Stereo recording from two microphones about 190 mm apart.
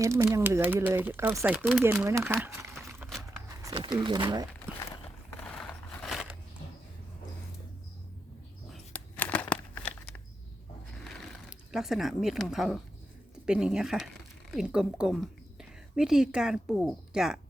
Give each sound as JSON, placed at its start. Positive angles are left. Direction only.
{"t": 0.0, "sound": "speech", "side_deg": -15}
{"t": 3.5, "sound": "a sound", "side_deg": -20}
{"t": 4.0, "sound": "speech", "side_deg": -20}
{"t": 5.4, "sound": "scrape", "side_deg": 10}
{"t": 8.7, "sound": "crumpling", "side_deg": 10}
{"t": 11.0, "sound": "a sound", "side_deg": 0}
{"t": 13.4, "sound": "a woman's voice", "side_deg": -5}